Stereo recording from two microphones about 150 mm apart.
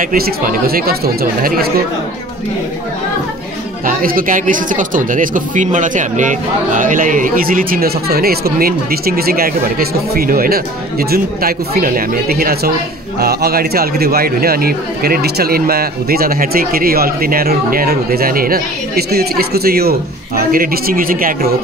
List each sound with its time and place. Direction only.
0.0 s speech: 65° right (ahead or behind); by 1.7 s 80° right
3.8 s a man's voice: 70° right (ahead or behind)